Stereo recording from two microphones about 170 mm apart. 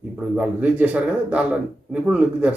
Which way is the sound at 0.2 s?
5° right (ahead or behind).